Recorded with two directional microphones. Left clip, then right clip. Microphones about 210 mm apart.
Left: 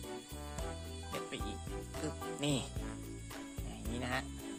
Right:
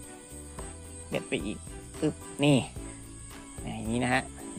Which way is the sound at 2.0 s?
15° right (ahead or behind).